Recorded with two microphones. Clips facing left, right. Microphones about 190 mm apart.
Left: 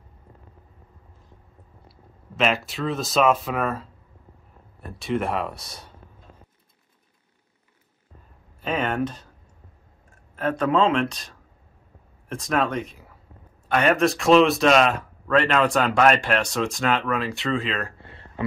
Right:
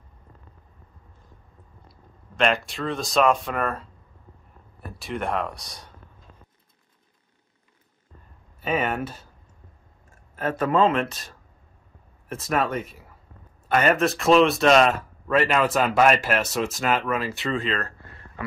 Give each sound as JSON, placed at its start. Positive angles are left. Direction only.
{"t": 2.3, "sound": "speech", "side_deg": 5}
{"t": 4.9, "sound": "speech", "side_deg": 0}
{"t": 8.5, "sound": "speech", "side_deg": -5}
{"t": 10.3, "sound": "speech", "side_deg": -5}
{"t": 18.0, "sound": "a sound", "side_deg": 25}